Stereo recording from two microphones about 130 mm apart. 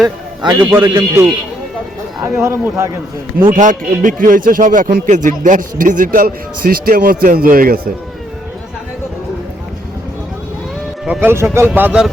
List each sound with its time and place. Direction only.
0.7 s speech: 20° right (ahead or behind)
3.5 s a man's voice: 85° right
5.0 s a man's voice: 75° right (ahead or behind)
11.0 s speech: 10° right (ahead or behind)